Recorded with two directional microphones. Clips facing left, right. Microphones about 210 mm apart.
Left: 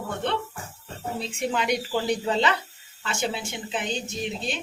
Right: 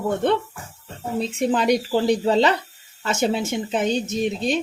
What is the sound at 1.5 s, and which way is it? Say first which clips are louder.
Speech: right 6 dB; 35° right (ahead or behind).